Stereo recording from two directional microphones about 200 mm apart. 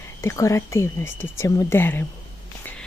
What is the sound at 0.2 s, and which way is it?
Speech, 15° left (ahead or behind).